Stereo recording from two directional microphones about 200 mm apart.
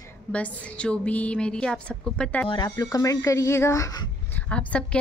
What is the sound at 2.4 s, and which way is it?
A woman's voice, 20° left (ahead or behind).